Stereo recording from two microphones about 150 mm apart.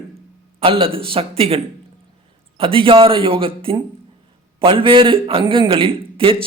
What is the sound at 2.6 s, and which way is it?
A man's voice, 35° right (ahead or behind).